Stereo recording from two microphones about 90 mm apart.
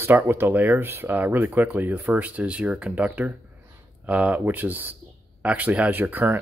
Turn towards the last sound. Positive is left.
turn(degrees=-20)  # may be behind; listen again after turning